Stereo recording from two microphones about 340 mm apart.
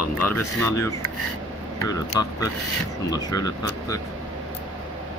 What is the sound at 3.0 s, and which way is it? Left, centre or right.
Speech, centre.